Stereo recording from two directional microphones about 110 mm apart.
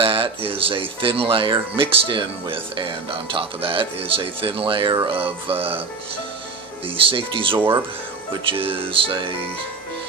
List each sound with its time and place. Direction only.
0.0 s speech: 55° right (ahead or behind)
6.8 s speech: 55° right (ahead or behind)